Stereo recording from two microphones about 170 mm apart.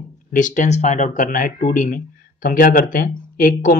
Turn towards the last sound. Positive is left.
turn(degrees=55)  # may be behind; listen again after turning